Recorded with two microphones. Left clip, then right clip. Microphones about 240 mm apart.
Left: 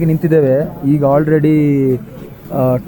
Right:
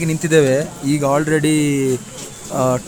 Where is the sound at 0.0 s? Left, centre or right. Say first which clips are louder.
Left 2 dB; centre.